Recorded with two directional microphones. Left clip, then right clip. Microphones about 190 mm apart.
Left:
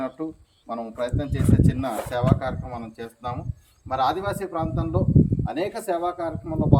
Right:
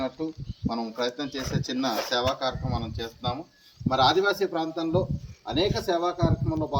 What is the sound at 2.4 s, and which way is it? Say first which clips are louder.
Speech: right 1 dB; 5° left (ahead or behind).